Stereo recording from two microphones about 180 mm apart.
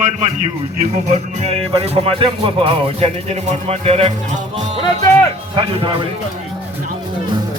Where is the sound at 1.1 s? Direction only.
35° right (ahead or behind).